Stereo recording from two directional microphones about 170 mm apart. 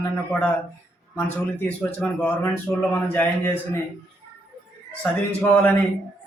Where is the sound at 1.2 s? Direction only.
10° left (ahead or behind).